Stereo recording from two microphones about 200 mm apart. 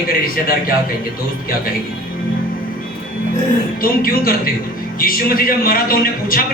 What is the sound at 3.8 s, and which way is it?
Speech, 45° left (ahead or behind).